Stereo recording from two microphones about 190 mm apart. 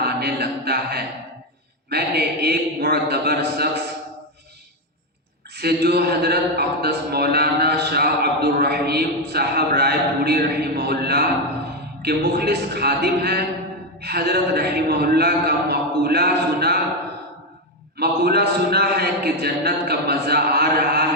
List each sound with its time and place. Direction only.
0.0 s music: 60° right (ahead or behind)
1.9 s a man's voice: 60° right (ahead or behind)
5.5 s a man's voice: 60° right (ahead or behind)
18.0 s a man's voice: 55° right (ahead or behind)